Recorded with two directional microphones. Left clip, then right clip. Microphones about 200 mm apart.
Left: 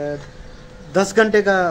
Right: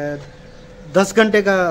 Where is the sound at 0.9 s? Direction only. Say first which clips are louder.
Right 1 dB; 35° right (ahead or behind).